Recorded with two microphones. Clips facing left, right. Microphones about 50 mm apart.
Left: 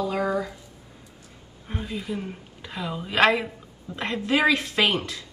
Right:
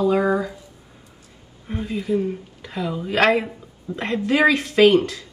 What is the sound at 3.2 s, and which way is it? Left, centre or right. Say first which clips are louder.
Speech: right 2 dB; right.